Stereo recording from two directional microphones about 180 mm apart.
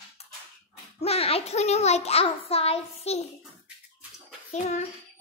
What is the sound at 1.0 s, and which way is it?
A child's voice, 35° left (ahead or behind).